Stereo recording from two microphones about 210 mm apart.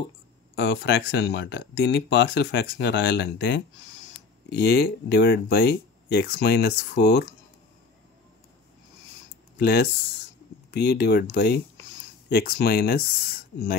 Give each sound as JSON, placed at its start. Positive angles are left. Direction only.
{"t": 0.6, "sound": "speech", "side_deg": 55}
{"t": 9.6, "sound": "speech", "side_deg": 50}